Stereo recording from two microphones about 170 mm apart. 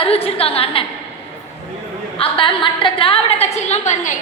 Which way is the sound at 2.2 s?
30° left (ahead or behind).